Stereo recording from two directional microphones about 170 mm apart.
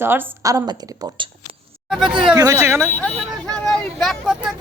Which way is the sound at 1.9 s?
Centre (ahead or behind).